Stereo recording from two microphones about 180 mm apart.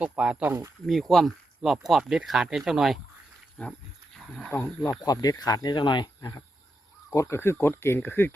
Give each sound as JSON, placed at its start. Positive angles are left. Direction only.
{"t": 0.0, "sound": "speech", "side_deg": -5}
{"t": 0.9, "sound": "speech", "side_deg": 0}
{"t": 4.4, "sound": "speech", "side_deg": 10}